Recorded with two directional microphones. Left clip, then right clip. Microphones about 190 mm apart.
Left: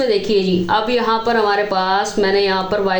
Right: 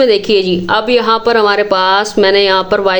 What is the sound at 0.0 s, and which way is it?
A woman's voice, 40° right (ahead or behind).